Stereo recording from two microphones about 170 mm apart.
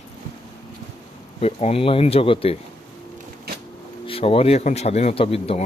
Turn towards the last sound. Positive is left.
turn(degrees=35)  # may be behind; listen again after turning